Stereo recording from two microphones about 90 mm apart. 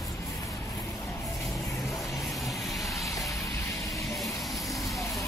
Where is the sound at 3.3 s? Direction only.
35° left (ahead or behind).